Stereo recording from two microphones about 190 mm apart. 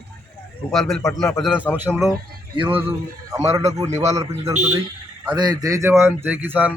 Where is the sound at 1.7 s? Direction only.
10° right (ahead or behind).